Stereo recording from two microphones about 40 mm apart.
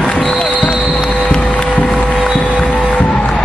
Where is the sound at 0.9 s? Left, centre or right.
Left.